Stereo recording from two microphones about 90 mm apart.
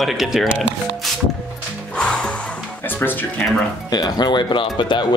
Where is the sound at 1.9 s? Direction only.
10° left (ahead or behind).